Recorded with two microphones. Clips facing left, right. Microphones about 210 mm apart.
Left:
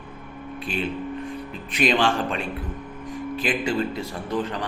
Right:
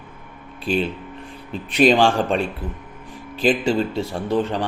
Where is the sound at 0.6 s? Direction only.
30° right (ahead or behind).